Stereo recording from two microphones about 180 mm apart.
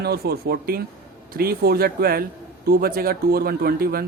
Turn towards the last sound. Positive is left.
turn(degrees=-55)  # may be behind; listen again after turning